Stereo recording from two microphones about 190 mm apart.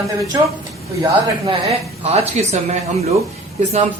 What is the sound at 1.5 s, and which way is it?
Speech, 35° right (ahead or behind).